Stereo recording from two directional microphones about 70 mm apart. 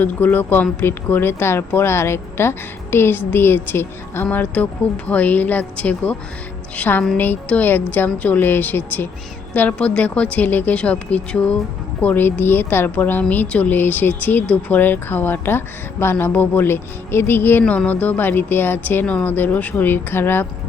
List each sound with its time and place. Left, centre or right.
0.0 s speech: left
17.6 s speech: centre